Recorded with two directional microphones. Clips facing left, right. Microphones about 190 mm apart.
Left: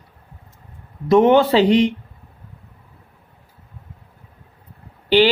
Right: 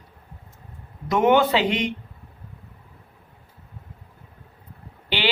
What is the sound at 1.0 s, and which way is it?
Speech, 30° left (ahead or behind).